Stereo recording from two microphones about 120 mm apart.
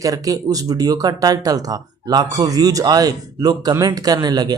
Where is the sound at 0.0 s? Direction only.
30° right (ahead or behind).